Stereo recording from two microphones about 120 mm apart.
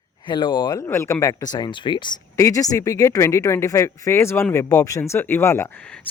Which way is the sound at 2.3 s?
25° left (ahead or behind).